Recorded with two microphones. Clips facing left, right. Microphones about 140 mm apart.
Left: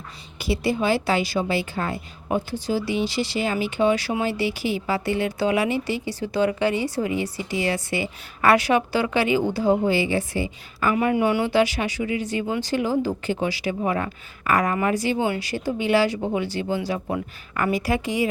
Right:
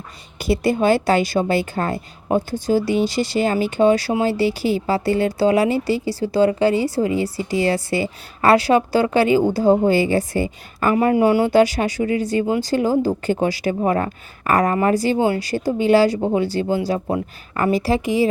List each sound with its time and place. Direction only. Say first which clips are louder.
0.3 s a woman's voice: right 5 dB; 45° right (ahead or behind); by 18.3 s 25° right (ahead or behind)